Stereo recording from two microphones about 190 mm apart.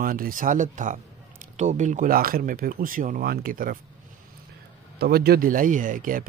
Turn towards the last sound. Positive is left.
turn(degrees=-45)  # may be behind; listen again after turning